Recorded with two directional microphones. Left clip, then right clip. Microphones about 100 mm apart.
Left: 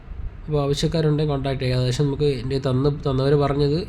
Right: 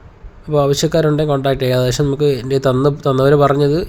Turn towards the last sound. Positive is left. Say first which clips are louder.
# right 8 dB
turn(degrees=-50)  # may be behind; listen again after turning